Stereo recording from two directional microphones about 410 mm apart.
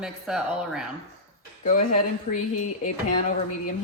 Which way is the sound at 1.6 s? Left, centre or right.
Centre.